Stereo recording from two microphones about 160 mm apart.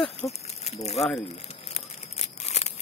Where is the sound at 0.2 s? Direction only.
40° left (ahead or behind).